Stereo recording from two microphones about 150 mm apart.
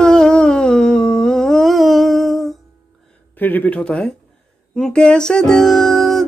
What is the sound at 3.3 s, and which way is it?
Speech, 10° left (ahead or behind).